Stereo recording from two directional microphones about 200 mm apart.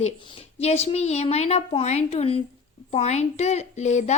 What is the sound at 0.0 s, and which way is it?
Speech, 30° left (ahead or behind).